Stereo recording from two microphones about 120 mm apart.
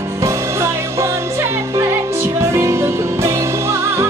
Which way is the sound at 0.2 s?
25° right (ahead or behind).